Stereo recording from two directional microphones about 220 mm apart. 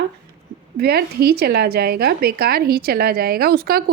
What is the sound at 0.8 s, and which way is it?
A woman's voice, 45° right (ahead or behind).